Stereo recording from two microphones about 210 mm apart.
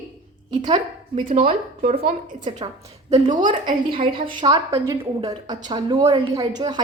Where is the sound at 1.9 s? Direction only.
40° right (ahead or behind).